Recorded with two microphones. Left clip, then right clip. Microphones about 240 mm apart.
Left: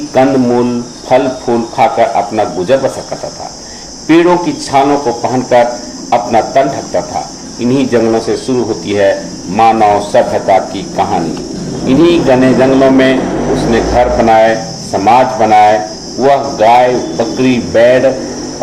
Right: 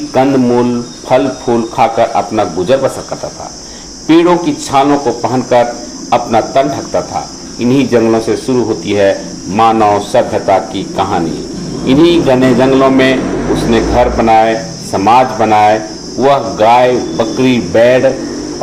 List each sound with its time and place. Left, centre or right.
0.1 s speech: right
4.0 s speech: right